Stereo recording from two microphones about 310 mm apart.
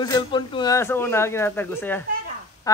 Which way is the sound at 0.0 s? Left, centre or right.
Centre.